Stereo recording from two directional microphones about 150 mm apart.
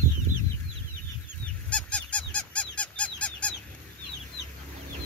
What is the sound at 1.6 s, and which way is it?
Honk, 10° left (ahead or behind).